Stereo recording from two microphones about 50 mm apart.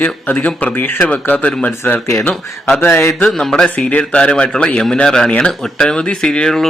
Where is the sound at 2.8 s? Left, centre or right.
Left.